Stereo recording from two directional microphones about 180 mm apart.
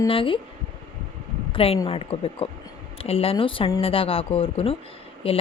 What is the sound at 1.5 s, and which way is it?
Speech, 30° left (ahead or behind).